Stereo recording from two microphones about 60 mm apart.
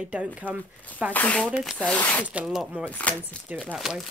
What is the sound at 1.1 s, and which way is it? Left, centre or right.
Speech, left.